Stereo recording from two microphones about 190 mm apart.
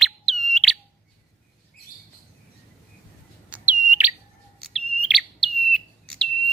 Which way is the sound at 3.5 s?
5° right (ahead or behind).